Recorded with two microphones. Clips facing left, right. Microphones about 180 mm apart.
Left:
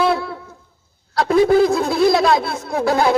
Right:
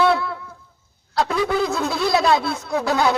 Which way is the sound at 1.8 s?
50° left (ahead or behind).